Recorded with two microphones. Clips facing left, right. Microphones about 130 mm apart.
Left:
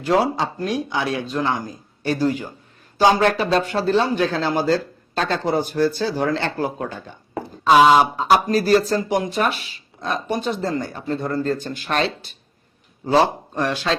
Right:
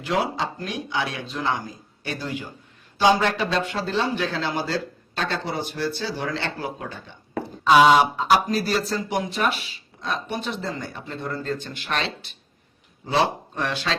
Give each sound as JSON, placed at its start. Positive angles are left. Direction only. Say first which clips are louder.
{"t": 0.0, "sound": "a man's voice", "louder": "left 6 dB", "side_deg": 40}